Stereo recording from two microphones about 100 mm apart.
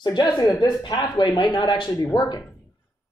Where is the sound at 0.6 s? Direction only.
45° left (ahead or behind).